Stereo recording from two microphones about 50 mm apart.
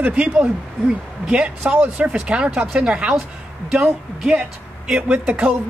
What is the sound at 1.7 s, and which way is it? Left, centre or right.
Speech, right.